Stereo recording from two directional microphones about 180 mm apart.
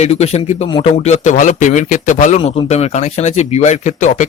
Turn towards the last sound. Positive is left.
turn(degrees=40)  # may be behind; listen again after turning